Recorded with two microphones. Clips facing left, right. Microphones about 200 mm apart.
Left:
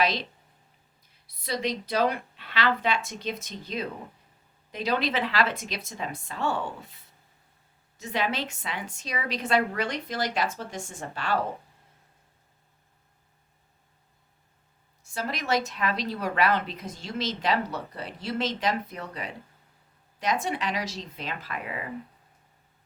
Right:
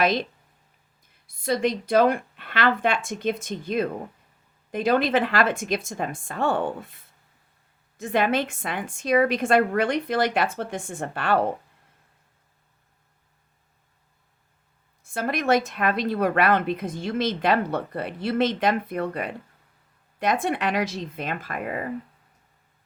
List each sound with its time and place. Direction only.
0.0 s a woman's voice: 50° right (ahead or behind)
1.3 s a woman's voice: 50° right (ahead or behind)
15.0 s speech: 55° right (ahead or behind)